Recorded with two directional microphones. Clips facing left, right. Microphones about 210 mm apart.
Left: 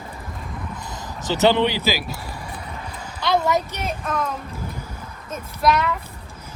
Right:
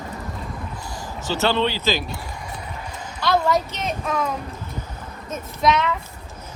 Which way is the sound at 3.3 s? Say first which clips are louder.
Even; 10° left (ahead or behind).